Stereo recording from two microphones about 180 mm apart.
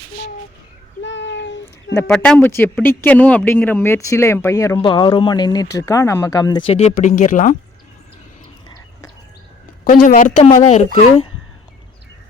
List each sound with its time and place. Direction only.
1.0 s a sound: 85° left
1.6 s speech: 15° left (ahead or behind)
4.8 s speech: 25° left (ahead or behind); by 7.5 s 45° left (ahead or behind)
9.9 s a woman's voice: 50° left (ahead or behind)